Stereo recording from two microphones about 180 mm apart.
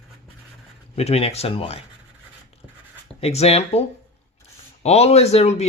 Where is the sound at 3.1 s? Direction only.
35° left (ahead or behind).